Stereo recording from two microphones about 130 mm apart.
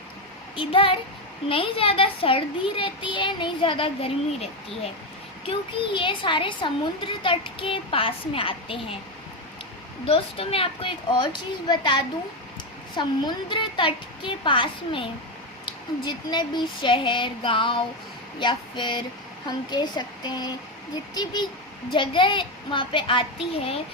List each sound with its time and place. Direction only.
0.5 s a child's voice: 40° left (ahead or behind)
10.1 s a child's voice: 45° left (ahead or behind)